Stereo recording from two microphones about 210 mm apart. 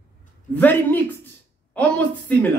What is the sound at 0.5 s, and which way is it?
Speech, 10° left (ahead or behind).